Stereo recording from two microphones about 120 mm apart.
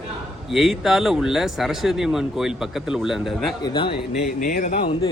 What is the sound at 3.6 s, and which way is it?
Speech, 40° left (ahead or behind).